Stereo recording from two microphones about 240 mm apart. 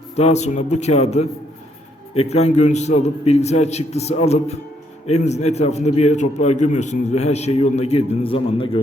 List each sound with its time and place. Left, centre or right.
0.2 s a man's voice: left